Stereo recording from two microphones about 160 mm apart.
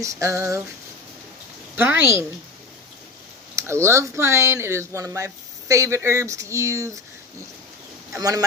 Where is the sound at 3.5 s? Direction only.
20° right (ahead or behind).